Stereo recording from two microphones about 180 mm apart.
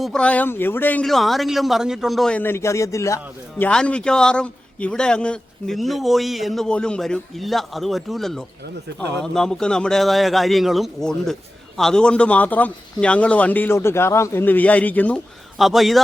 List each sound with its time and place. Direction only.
0.0 s a man's voice: 5° left (ahead or behind)
3.6 s a man's voice: 5° left (ahead or behind)
8.9 s speech: 70° right (ahead or behind)
9.2 s a man's voice: 5° left (ahead or behind)